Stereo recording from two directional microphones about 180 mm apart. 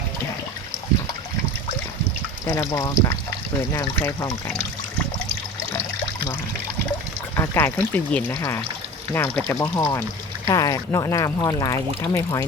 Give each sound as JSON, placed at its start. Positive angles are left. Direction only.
{"t": 2.5, "sound": "speech", "side_deg": 15}
{"t": 7.3, "sound": "pour", "side_deg": 15}
{"t": 7.9, "sound": "speech", "side_deg": 10}